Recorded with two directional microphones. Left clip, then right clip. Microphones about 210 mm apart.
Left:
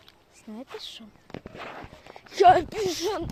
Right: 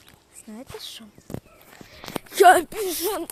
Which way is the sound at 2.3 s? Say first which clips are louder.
Right 3 dB; 15° right (ahead or behind).